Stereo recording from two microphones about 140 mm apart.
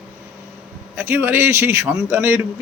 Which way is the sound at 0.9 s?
15° right (ahead or behind).